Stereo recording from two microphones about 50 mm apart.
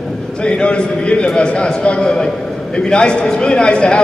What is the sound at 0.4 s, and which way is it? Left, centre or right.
A man's voice, left.